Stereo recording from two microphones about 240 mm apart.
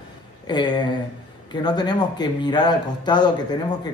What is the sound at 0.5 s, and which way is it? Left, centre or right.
Speech, centre.